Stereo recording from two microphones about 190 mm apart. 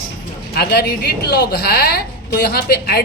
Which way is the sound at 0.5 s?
55° left (ahead or behind).